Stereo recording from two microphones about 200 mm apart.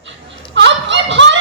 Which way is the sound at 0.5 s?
65° right (ahead or behind).